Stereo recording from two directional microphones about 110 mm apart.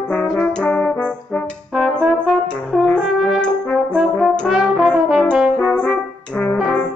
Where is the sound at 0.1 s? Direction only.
10° left (ahead or behind).